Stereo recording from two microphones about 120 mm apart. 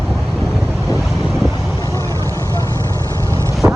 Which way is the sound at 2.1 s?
30° right (ahead or behind).